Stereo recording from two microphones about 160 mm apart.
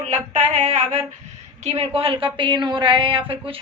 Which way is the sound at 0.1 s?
45° right (ahead or behind).